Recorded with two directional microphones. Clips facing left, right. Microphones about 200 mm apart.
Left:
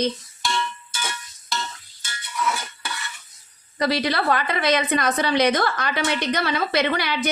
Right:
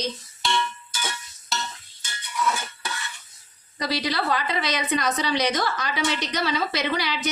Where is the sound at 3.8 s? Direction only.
55° left (ahead or behind).